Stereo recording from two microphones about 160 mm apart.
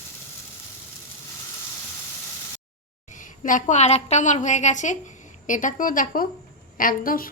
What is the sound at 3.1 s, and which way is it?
A woman's voice, 55° left (ahead or behind).